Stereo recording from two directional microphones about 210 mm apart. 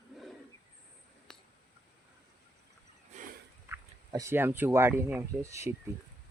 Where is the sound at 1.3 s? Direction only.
5° left (ahead or behind).